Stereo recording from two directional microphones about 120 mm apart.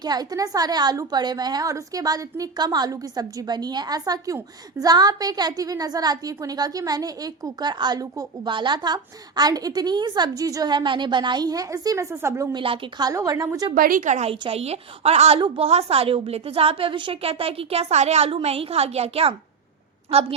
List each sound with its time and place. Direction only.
0.0 s a woman's voice: 35° right (ahead or behind)
12.5 s a woman's voice: 45° right (ahead or behind)
13.0 s a woman's voice: 30° right (ahead or behind)
14.0 s a woman's voice: 90° right
14.3 s a woman's voice: 55° right (ahead or behind)
15.4 s a woman's voice: 45° right (ahead or behind)